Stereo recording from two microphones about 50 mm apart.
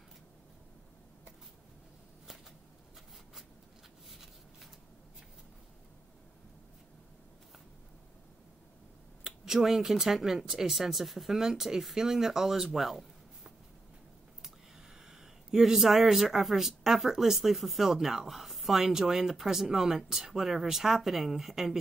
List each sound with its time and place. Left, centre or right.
4.1 s a sound: centre
9.2 s speech: centre
15.0 s speech: centre